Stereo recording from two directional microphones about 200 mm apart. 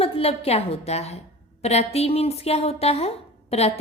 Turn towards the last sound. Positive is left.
turn(degrees=30)  # may be behind; listen again after turning